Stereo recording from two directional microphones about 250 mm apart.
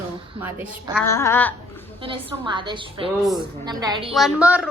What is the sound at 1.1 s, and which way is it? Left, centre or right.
Babbling, centre.